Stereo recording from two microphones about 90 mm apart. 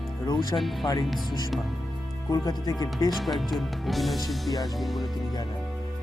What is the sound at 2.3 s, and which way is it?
Speech, 45° left (ahead or behind).